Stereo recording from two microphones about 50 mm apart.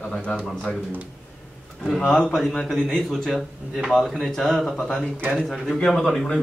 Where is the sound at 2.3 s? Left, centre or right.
Centre.